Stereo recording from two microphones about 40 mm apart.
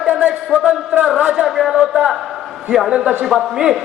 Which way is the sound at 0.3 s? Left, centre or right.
Right.